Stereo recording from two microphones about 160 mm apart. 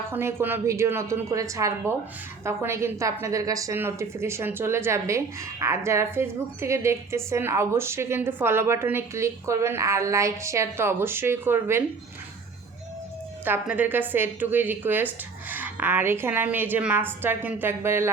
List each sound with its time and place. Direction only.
0.1 s a woman's voice: 15° right (ahead or behind)
13.4 s a woman's voice: 10° right (ahead or behind)